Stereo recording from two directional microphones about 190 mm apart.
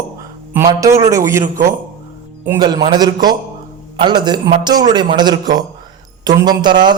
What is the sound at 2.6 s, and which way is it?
A man's voice, 20° right (ahead or behind).